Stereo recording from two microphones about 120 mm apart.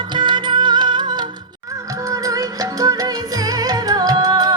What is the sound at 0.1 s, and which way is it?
Music, 40° right (ahead or behind).